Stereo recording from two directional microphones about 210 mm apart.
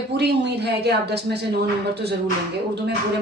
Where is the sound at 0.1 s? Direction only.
50° right (ahead or behind).